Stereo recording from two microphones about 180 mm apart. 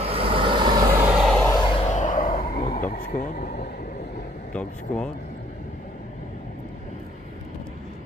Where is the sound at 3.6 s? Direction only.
55° left (ahead or behind).